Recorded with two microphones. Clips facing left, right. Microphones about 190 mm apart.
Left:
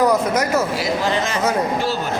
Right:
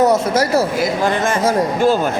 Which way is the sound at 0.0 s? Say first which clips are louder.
Right 3 dB; 30° right (ahead or behind).